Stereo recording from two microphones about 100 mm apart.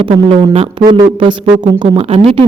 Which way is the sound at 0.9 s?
55° right (ahead or behind).